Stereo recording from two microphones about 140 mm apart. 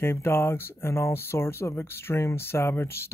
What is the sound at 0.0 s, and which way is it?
Speech, 15° left (ahead or behind).